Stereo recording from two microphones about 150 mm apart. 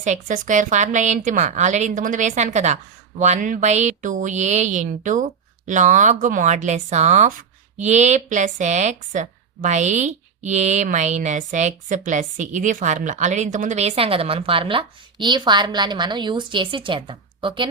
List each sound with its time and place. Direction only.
0.0 s a woman's voice: 55° right (ahead or behind); by 17.7 s 35° right (ahead or behind)